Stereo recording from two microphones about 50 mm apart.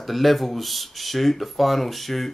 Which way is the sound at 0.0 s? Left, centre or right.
Centre.